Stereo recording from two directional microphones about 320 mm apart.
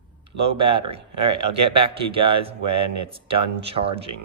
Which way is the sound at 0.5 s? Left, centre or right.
Centre.